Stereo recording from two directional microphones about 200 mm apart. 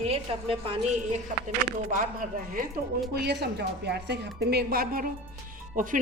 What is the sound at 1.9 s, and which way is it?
Speech, 40° right (ahead or behind).